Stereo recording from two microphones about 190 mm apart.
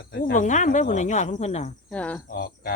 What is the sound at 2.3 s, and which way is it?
Cricket, 55° left (ahead or behind).